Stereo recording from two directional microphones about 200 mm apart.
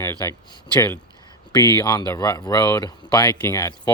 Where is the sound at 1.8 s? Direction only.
20° left (ahead or behind).